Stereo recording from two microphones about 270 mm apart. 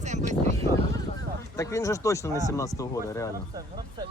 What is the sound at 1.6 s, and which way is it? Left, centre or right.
Speech, centre.